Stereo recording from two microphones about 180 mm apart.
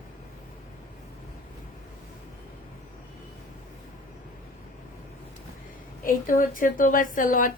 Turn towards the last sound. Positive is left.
turn(degrees=50)  # may be behind; listen again after turning